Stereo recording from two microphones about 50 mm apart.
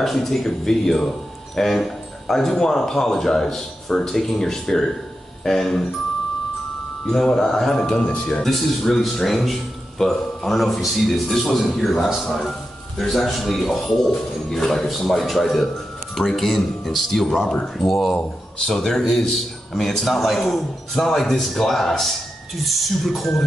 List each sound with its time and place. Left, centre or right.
0.0 s speech: centre
7.1 s speech: centre
8.0 s a man's voice: left
8.4 s a man's voice: centre